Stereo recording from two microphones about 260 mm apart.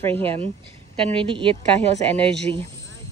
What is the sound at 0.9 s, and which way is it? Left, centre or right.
A woman's voice, right.